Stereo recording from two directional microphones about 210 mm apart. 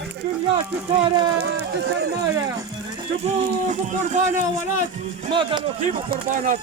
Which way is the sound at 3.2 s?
35° right (ahead or behind).